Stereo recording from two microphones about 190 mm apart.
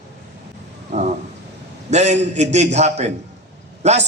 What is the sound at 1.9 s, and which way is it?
A man's voice, 35° right (ahead or behind).